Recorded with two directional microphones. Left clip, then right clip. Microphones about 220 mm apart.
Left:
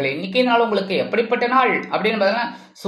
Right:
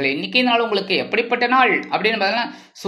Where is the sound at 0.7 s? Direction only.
35° right (ahead or behind).